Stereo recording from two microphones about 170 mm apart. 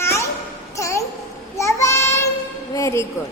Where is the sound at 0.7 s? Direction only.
20° left (ahead or behind).